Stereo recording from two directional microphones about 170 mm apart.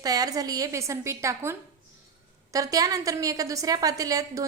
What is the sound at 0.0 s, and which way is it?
A woman's voice, 20° right (ahead or behind).